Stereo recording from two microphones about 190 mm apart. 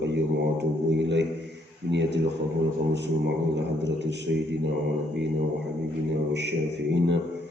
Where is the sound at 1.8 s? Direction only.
65° right (ahead or behind).